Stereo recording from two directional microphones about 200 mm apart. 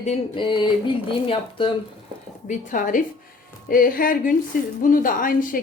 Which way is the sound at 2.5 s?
40° left (ahead or behind).